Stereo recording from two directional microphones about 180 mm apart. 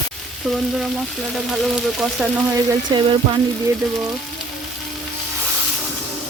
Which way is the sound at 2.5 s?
20° right (ahead or behind).